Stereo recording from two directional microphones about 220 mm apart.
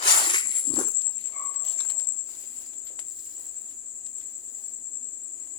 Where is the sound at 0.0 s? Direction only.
20° left (ahead or behind).